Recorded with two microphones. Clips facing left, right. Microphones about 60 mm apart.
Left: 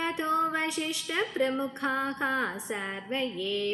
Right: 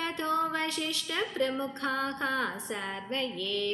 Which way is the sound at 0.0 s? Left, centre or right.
Centre.